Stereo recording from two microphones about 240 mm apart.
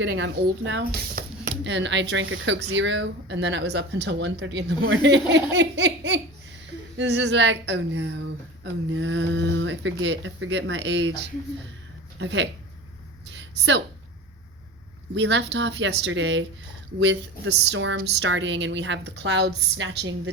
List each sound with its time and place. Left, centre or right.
0.0 s speech: right
12.2 s speech: right
13.5 s a woman's voice: right
15.1 s speech: right